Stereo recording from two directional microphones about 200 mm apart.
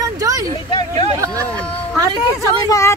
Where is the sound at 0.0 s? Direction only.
15° right (ahead or behind).